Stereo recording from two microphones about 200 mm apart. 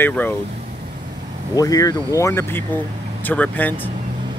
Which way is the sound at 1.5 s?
15° left (ahead or behind).